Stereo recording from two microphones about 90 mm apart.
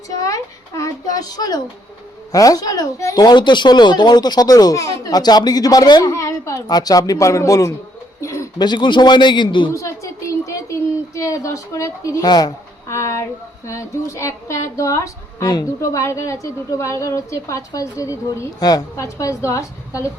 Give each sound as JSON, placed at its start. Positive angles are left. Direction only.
{"t": 0.8, "sound": "a child's voice", "side_deg": 40}
{"t": 6.1, "sound": "a sound", "side_deg": 35}
{"t": 6.7, "sound": "speech", "side_deg": 45}
{"t": 8.2, "sound": "bird", "side_deg": 35}
{"t": 8.5, "sound": "a man's voice", "side_deg": 55}
{"t": 9.7, "sound": "a sound", "side_deg": 35}
{"t": 12.2, "sound": "speech", "side_deg": 50}
{"t": 12.9, "sound": "speech", "side_deg": 35}